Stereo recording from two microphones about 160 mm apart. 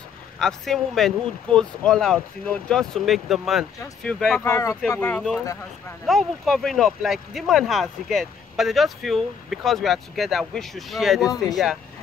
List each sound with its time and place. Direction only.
0.4 s speech: centre (ahead or behind)
4.5 s speech: 20° left (ahead or behind)
5.4 s speech: 20° left (ahead or behind)
6.0 s speech: centre (ahead or behind)